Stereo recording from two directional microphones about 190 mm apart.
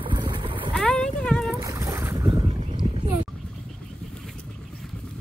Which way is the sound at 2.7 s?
25° right (ahead or behind).